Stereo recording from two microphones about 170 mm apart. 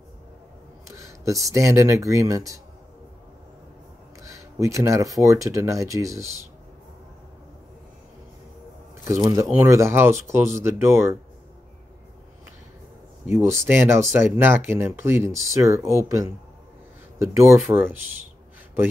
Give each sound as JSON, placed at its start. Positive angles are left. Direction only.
{"t": 0.8, "sound": "a sound", "side_deg": -20}
{"t": 1.5, "sound": "speech", "side_deg": -15}
{"t": 4.2, "sound": "speech", "side_deg": -20}
{"t": 9.0, "sound": "speech", "side_deg": -15}
{"t": 13.3, "sound": "speech", "side_deg": -15}
{"t": 17.2, "sound": "speech", "side_deg": -15}